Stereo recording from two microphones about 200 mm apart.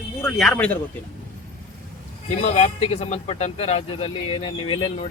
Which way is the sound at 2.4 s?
35° left (ahead or behind).